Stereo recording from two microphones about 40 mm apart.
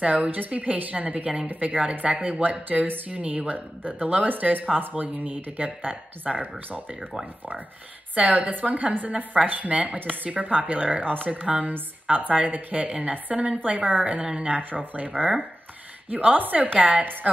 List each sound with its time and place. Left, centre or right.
0.0 s speech: right
1.5 s a woman's voice: right
2.0 s a woman's voice: right
8.1 s a woman's voice: right